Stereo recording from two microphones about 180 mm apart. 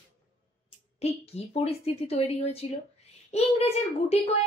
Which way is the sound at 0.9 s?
35° left (ahead or behind).